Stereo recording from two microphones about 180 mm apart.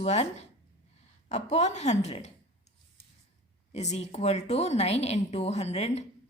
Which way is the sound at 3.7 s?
40° left (ahead or behind).